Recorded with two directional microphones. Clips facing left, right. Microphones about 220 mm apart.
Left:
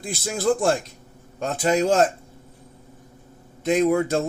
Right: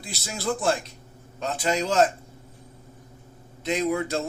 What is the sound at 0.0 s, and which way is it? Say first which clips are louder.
A man's voice: left 7 dB; 50° left (ahead or behind).